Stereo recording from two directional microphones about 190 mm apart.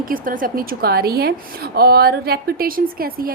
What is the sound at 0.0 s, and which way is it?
A woman's voice, 45° right (ahead or behind).